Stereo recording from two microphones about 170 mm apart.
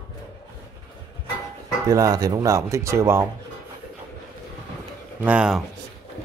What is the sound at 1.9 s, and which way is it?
Speech, 20° right (ahead or behind).